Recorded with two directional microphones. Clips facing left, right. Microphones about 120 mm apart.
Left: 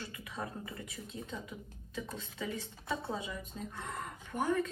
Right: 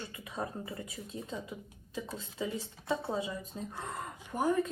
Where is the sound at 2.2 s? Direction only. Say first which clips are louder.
Right 3 dB; 25° right (ahead or behind).